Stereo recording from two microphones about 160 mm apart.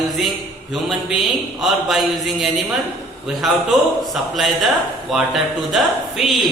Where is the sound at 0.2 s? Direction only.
Centre (ahead or behind).